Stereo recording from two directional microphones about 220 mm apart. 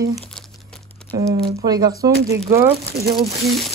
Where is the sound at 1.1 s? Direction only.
10° left (ahead or behind).